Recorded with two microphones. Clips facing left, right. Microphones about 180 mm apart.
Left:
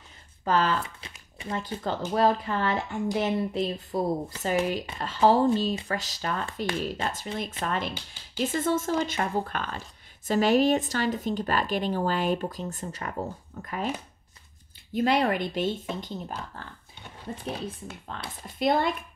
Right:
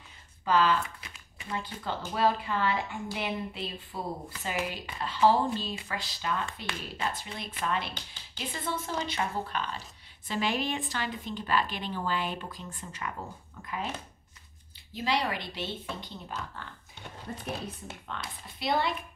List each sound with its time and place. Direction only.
0.5 s speech: 45° left (ahead or behind)
0.8 s a sound: 25° left (ahead or behind)
1.8 s speech: 40° left (ahead or behind)
15.0 s speech: 50° left (ahead or behind)
18.0 s speech: 40° left (ahead or behind)